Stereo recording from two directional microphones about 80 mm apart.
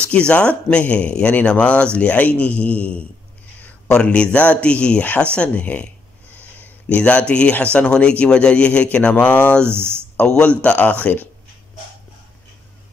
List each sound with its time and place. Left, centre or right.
0.1 s a man's voice: centre
9.7 s speech: right
10.1 s a man's voice: centre